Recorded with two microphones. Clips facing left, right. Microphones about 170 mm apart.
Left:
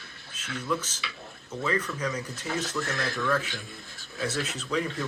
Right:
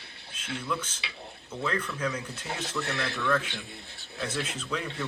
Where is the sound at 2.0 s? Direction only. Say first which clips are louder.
Even; 10° right (ahead or behind).